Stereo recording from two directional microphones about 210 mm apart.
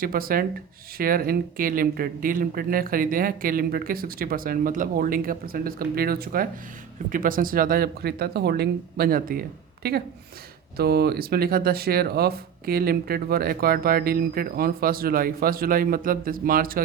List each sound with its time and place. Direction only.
0.0 s speech: 45° right (ahead or behind)